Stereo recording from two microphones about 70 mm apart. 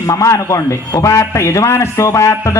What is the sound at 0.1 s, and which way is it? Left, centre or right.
A man's voice, left.